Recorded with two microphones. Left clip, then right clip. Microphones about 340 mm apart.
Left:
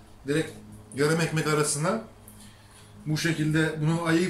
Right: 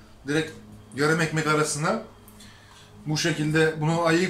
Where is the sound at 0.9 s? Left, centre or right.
Centre.